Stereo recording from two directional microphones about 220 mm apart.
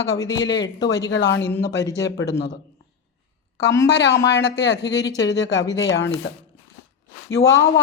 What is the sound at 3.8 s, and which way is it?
Speech, 50° left (ahead or behind).